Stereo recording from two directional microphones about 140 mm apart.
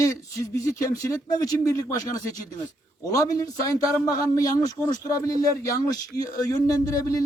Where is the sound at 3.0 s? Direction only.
25° left (ahead or behind).